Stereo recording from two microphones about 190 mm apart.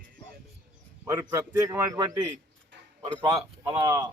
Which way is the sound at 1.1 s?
15° right (ahead or behind).